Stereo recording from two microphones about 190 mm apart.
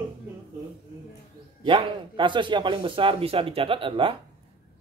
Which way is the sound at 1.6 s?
25° right (ahead or behind).